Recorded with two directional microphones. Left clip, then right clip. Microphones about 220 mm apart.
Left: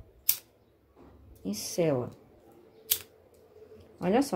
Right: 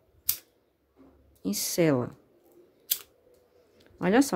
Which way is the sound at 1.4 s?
35° right (ahead or behind).